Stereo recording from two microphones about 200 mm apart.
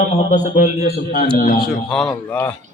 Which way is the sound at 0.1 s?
40° left (ahead or behind).